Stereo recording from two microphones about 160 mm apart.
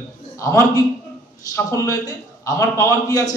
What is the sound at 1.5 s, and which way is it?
A man's voice, 20° left (ahead or behind).